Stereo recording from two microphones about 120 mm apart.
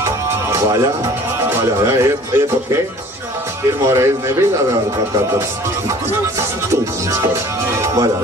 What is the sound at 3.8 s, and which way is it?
Speech, 25° right (ahead or behind).